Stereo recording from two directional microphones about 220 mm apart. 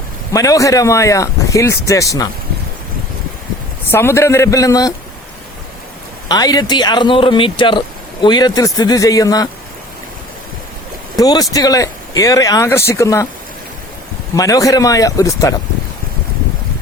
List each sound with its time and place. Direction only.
0.3 s speech: 15° left (ahead or behind)
3.9 s speech: 10° left (ahead or behind)
6.2 s a man's voice: 15° left (ahead or behind)
11.2 s speech: 15° left (ahead or behind)
14.3 s speech: 15° left (ahead or behind)